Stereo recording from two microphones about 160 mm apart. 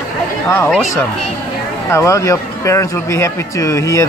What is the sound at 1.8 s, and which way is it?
Speech, 20° left (ahead or behind).